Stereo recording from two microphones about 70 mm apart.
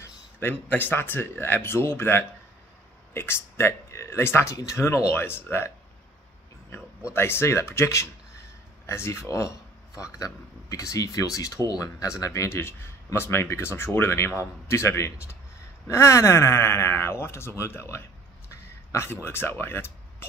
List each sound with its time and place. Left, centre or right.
0.4 s speech: left
7.2 s speech: left
18.5 s a sound: left
19.2 s speech: left